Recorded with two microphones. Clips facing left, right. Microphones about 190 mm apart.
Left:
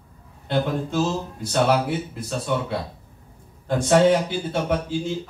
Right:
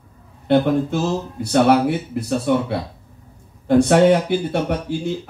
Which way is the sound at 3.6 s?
60° right (ahead or behind).